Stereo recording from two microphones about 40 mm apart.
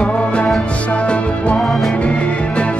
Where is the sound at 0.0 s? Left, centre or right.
Left.